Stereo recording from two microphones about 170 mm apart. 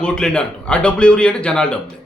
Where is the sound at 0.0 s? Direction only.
5° left (ahead or behind).